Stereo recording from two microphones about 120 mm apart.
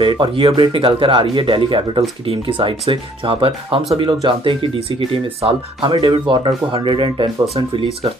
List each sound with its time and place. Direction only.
0.0 s speech: 45° right (ahead or behind)